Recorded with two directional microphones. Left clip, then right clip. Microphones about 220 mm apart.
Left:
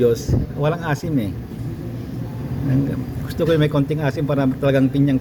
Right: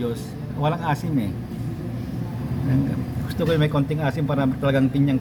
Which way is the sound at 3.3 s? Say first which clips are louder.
Left 4 dB; 15° left (ahead or behind).